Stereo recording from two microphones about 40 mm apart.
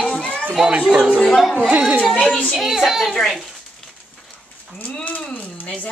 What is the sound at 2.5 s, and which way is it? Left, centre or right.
Speech, centre.